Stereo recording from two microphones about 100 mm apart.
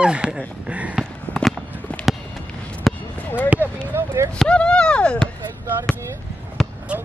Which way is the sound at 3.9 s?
25° right (ahead or behind).